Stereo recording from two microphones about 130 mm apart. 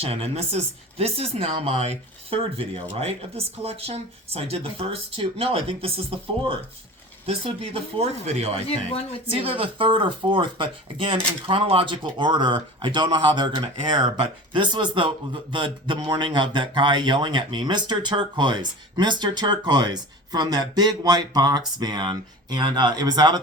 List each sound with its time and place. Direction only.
0.0 s speech: 50° right (ahead or behind); by 23.4 s 35° right (ahead or behind)